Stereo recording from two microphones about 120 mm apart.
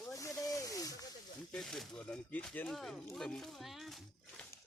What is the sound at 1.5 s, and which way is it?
Speech, 5° left (ahead or behind).